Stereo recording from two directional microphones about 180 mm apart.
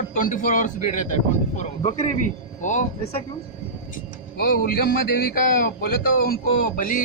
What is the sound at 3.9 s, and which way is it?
Speech, 55° left (ahead or behind).